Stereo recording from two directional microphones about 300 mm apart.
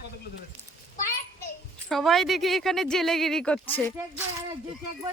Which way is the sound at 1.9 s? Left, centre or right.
Centre.